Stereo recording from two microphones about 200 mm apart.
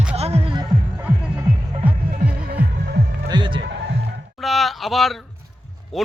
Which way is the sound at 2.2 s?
50° right (ahead or behind).